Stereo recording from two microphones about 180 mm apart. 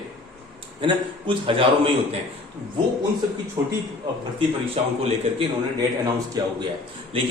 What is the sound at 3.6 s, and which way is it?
Speech, 20° right (ahead or behind).